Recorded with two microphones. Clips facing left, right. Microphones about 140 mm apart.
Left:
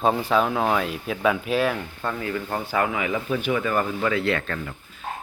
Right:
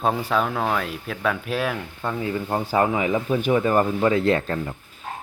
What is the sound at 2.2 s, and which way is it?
Speech, 20° right (ahead or behind).